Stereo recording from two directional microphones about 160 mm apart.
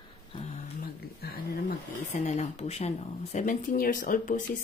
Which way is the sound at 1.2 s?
70° left (ahead or behind).